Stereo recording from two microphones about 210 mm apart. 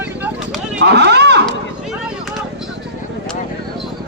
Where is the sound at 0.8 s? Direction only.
55° right (ahead or behind).